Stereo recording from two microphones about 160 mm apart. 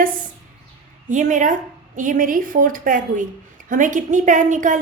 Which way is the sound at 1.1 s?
50° right (ahead or behind).